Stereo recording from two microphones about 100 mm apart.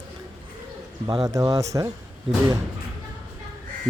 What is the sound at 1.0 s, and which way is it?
Speech, 40° right (ahead or behind).